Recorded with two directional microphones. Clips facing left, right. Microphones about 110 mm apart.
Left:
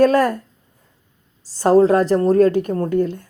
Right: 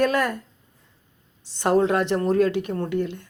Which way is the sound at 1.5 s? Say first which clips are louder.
Left 7 dB; 35° left (ahead or behind).